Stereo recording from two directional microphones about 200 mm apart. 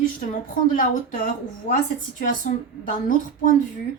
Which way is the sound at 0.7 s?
40° left (ahead or behind).